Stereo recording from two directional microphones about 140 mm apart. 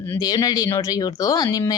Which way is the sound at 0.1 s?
25° left (ahead or behind).